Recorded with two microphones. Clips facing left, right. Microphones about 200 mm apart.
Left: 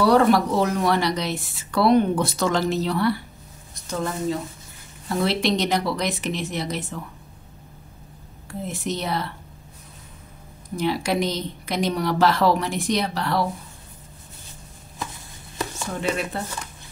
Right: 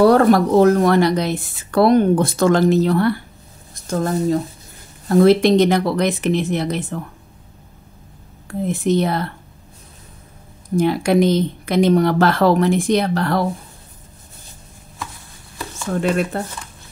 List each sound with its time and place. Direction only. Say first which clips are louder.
0.0 s speech: right 5 dB; 50° right (ahead or behind)
8.6 s speech: right 10 dB; 55° right (ahead or behind)
10.8 s speech: right 8 dB; 50° right (ahead or behind)
15.9 s speech: right 8 dB; 50° right (ahead or behind)